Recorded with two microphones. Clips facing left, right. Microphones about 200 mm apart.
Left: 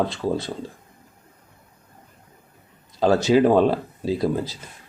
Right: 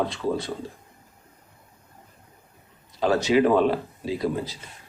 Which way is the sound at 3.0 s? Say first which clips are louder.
Left 3 dB; 35° left (ahead or behind).